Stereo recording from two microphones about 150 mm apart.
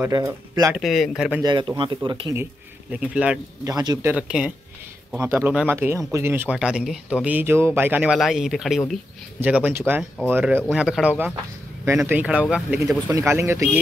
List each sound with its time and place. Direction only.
0.0 s speech: 20° right (ahead or behind)
0.7 s speech: centre (ahead or behind)
1.4 s a man's voice: 30° right (ahead or behind)
2.9 s speech: 5° right (ahead or behind)
3.6 s speech: 25° right (ahead or behind)
4.0 s speech: 5° right (ahead or behind)
9.4 s speech: 10° right (ahead or behind)
13.1 s speech: 20° right (ahead or behind)